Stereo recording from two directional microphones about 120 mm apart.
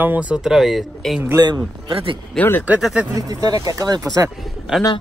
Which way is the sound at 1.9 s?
50° right (ahead or behind).